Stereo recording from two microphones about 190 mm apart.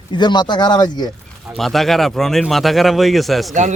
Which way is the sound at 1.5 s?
Centre (ahead or behind).